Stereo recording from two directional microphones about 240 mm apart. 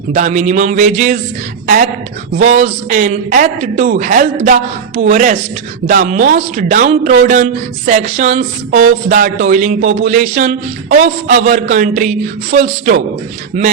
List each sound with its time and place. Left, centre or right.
0.1 s a woman's voice: right